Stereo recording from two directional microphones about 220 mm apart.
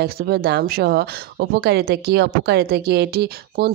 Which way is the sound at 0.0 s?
45° right (ahead or behind).